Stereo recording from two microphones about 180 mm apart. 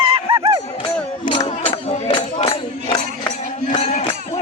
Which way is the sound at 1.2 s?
25° left (ahead or behind).